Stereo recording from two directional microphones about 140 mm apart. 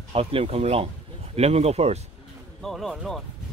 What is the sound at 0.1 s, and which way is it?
Speech, 45° right (ahead or behind).